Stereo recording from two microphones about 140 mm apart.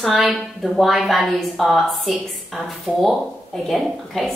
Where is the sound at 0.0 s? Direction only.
Centre (ahead or behind).